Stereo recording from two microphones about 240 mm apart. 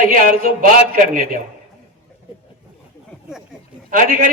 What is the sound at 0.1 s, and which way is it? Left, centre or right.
Speech, right.